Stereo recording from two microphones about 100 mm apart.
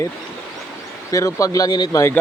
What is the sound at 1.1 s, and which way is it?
Speech, 35° left (ahead or behind).